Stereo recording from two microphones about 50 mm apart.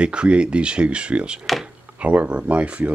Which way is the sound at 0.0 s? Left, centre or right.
Right.